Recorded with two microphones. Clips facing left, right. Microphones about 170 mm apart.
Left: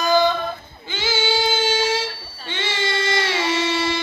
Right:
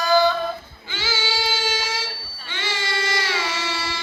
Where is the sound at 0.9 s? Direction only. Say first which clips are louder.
Left 5 dB; 20° left (ahead or behind).